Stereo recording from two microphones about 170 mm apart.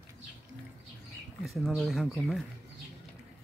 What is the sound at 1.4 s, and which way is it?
Speech, centre (ahead or behind).